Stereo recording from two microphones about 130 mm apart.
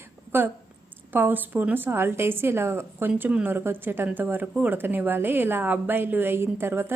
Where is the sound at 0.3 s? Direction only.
15° right (ahead or behind).